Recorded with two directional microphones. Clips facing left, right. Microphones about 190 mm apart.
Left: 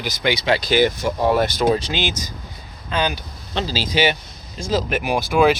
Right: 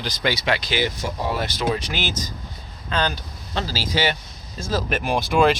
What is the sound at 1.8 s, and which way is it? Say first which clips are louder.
Speech: left 3 dB; 20° left (ahead or behind).